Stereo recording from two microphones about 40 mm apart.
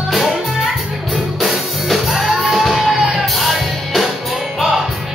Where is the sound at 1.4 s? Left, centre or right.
Centre.